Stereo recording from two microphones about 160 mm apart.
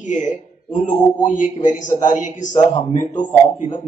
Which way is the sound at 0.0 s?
50° left (ahead or behind).